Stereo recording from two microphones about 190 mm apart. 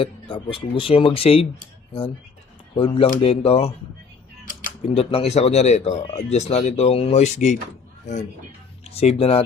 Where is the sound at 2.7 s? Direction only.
30° left (ahead or behind).